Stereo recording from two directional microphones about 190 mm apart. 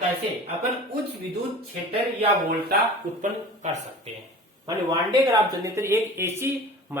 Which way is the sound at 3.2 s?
40° right (ahead or behind).